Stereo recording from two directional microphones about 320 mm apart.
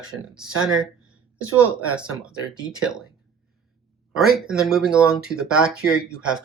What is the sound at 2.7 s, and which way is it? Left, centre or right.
Speech, centre.